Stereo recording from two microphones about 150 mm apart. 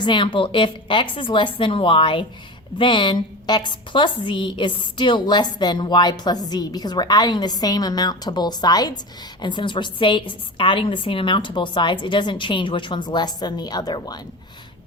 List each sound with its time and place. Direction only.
0.0 s a woman's voice: 30° left (ahead or behind)